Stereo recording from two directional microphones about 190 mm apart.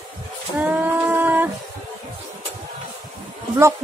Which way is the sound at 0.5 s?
10° right (ahead or behind).